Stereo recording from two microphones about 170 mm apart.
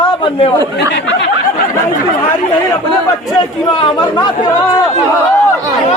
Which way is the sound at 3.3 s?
25° left (ahead or behind).